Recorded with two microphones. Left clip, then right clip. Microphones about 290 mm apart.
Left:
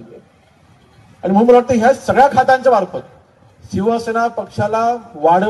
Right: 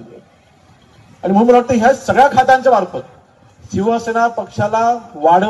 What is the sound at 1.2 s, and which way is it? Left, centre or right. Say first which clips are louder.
A man's voice: even; left.